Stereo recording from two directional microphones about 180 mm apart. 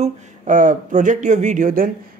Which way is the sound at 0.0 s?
45° right (ahead or behind).